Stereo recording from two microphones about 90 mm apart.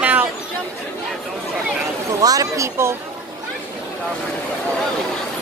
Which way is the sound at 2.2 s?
40° right (ahead or behind).